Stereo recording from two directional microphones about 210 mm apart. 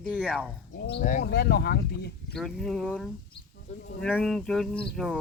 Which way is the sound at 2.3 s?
Centre (ahead or behind).